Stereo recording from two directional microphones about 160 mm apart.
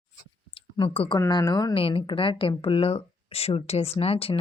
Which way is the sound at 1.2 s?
25° left (ahead or behind).